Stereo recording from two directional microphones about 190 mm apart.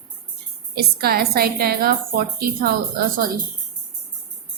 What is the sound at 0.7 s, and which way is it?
A woman's voice, 55° right (ahead or behind).